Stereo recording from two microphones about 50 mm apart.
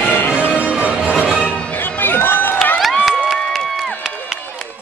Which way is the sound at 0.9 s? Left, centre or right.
Centre.